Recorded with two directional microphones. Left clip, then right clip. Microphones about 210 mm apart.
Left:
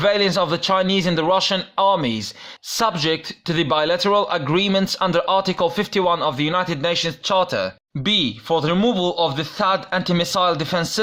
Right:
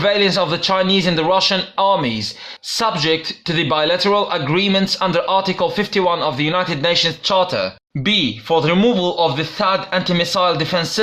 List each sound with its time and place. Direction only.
0.0 s speech: 25° left (ahead or behind)